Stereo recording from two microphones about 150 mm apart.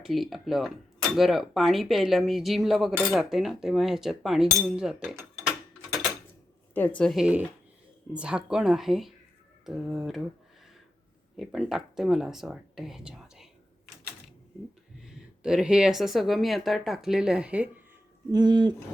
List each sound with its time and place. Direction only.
0.0 s speech: centre (ahead or behind)
6.7 s speech: 10° left (ahead or behind)
11.3 s speech: centre (ahead or behind)
15.0 s speech: 5° right (ahead or behind)
18.3 s speech: 30° right (ahead or behind)